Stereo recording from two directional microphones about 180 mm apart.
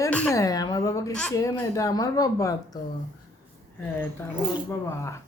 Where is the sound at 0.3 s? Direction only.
20° left (ahead or behind).